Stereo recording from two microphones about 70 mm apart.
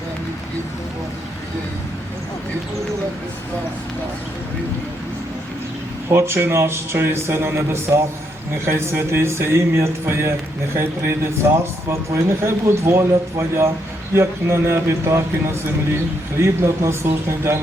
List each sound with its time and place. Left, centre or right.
6.1 s a man's voice: right